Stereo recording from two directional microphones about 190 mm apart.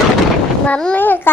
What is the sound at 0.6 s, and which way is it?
Speech, 5° left (ahead or behind).